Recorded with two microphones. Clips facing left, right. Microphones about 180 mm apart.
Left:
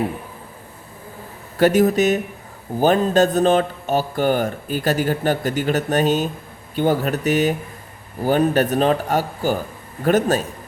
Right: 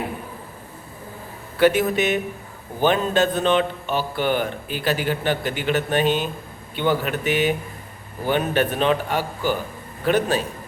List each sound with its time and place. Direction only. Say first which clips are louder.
1.5 s a man's voice: left 3 dB; 40° left (ahead or behind)